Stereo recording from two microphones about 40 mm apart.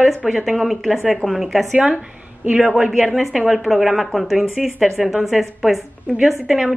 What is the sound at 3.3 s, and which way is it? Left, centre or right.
A woman's voice, centre.